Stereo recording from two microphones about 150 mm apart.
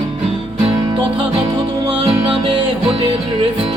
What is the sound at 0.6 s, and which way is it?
Music, 35° right (ahead or behind).